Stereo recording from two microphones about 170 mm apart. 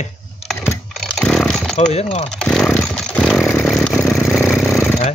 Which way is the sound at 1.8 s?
40° left (ahead or behind).